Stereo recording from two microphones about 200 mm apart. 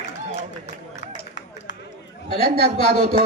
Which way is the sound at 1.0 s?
60° left (ahead or behind).